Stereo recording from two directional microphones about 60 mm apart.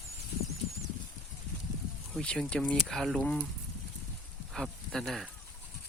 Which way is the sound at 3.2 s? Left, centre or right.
Left.